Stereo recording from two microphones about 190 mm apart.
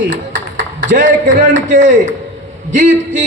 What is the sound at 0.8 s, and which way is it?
A man's voice, 40° right (ahead or behind).